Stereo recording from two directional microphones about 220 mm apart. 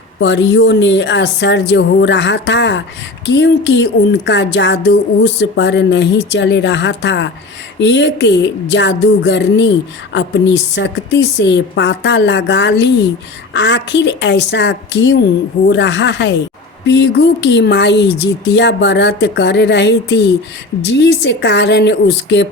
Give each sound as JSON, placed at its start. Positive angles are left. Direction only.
{"t": 0.2, "sound": "speech", "side_deg": 55}